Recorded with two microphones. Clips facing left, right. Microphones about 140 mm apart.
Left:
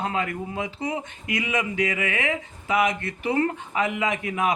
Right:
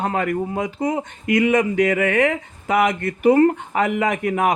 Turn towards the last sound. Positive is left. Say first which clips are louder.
# right 6 dB
turn(degrees=-50)  # may be behind; listen again after turning